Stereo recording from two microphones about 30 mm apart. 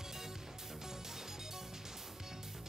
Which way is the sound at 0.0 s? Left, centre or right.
Centre.